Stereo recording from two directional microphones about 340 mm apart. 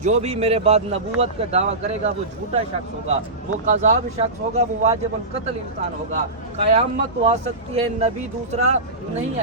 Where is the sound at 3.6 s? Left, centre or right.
Right.